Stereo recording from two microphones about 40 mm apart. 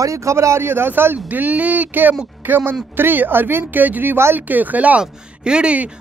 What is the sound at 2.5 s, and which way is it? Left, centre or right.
Speech, right.